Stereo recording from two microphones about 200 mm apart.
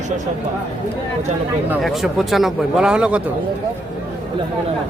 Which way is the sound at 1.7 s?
Centre (ahead or behind).